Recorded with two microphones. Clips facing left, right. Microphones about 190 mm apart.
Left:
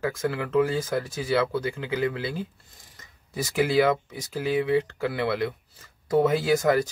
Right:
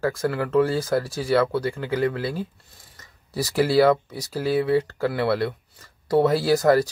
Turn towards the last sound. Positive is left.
turn(degrees=-35)  # may be behind; listen again after turning